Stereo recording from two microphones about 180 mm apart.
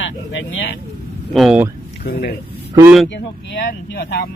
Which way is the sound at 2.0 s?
60° left (ahead or behind).